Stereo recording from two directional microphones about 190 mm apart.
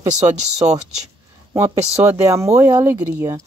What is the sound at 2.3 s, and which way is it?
Speech, 15° right (ahead or behind).